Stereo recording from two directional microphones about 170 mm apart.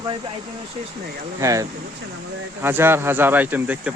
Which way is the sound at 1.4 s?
20° right (ahead or behind).